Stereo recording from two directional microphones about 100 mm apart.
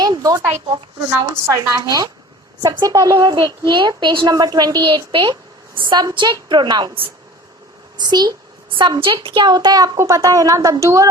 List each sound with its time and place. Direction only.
0.0 s a sound: 40° right (ahead or behind)
1.2 s a woman's voice: 40° right (ahead or behind); by 5.3 s 55° right (ahead or behind)
5.9 s a child's voice: 45° right (ahead or behind)
7.9 s a child's voice: 45° right (ahead or behind)
9.0 s a woman's voice: 55° right (ahead or behind); by 11.1 s 35° right (ahead or behind)